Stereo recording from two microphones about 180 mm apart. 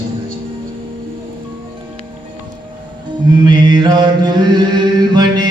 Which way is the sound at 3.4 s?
25° right (ahead or behind).